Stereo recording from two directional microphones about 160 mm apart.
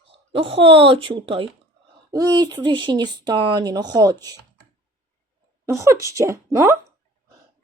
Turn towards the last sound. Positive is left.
turn(degrees=-20)  # may be behind; listen again after turning